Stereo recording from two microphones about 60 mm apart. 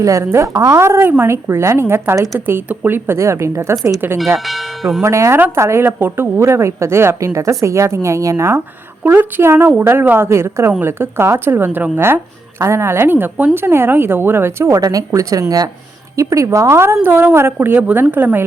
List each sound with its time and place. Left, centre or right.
0.0 s a woman's voice: right
1.0 s speech: right
1.3 s a woman's voice: right
2.1 s speech: right
2.6 s a woman's voice: right
4.4 s speech: centre
5.0 s a woman's voice: right
9.1 s speech: right
14.7 s a woman's voice: right
16.1 s a woman's voice: right
17.0 s speech: right
17.7 s a woman's voice: right